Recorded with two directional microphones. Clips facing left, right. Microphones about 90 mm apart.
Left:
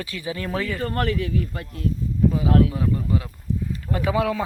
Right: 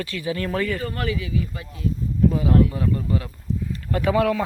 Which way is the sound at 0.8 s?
50° left (ahead or behind).